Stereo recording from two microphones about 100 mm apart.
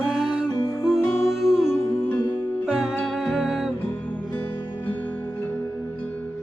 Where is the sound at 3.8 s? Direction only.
15° left (ahead or behind).